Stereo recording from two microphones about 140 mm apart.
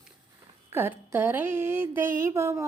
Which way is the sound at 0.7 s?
15° right (ahead or behind).